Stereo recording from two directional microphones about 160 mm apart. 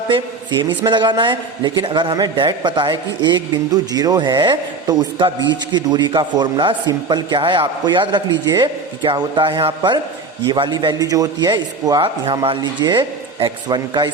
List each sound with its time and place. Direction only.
0.1 s a man's voice: 30° right (ahead or behind)